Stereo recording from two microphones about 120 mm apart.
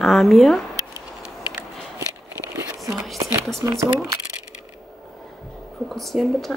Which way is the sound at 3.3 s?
25° right (ahead or behind).